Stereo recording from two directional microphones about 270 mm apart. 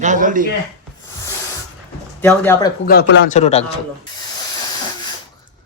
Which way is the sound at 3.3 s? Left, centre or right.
Left.